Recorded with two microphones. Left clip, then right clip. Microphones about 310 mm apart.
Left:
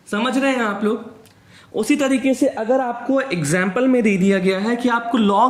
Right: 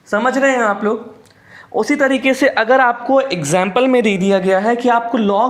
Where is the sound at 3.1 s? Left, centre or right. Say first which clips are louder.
Right 6 dB; centre.